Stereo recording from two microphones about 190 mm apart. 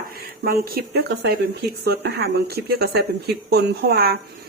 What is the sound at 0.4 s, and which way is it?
Speech, 50° right (ahead or behind).